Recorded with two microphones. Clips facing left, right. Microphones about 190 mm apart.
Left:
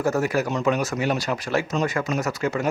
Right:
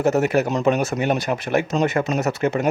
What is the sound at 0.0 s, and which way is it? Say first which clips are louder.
Speech: right 4 dB; 20° right (ahead or behind).